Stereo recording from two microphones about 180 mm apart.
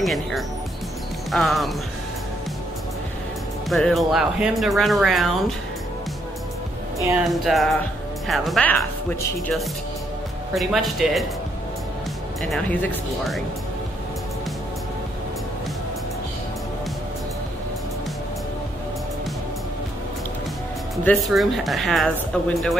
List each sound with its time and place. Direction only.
0.0 s speech: centre (ahead or behind)
3.6 s speech: centre (ahead or behind)
7.2 s speech: centre (ahead or behind)
10.5 s speech: centre (ahead or behind)
12.4 s speech: 5° left (ahead or behind)
20.9 s speech: 5° left (ahead or behind)